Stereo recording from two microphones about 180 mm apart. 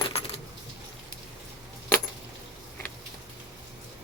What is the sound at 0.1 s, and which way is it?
Keys jangling, 35° left (ahead or behind).